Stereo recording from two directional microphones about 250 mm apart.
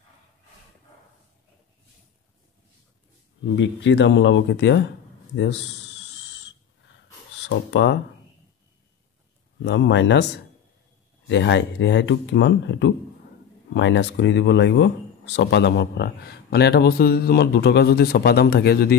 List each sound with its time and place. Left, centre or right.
3.5 s speech: left
9.6 s speech: left
11.2 s speech: left